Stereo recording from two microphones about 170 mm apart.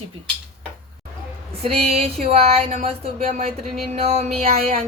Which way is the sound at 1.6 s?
40° right (ahead or behind).